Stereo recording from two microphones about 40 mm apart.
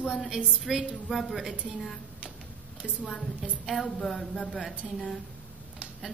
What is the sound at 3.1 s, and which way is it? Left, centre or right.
A woman's voice, centre.